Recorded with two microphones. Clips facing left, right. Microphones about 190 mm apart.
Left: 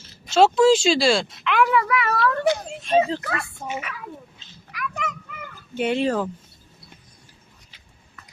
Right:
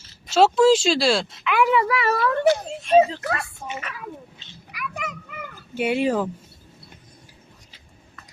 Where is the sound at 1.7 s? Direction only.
30° right (ahead or behind).